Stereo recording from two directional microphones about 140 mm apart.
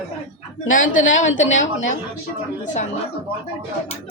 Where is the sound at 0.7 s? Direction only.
65° left (ahead or behind).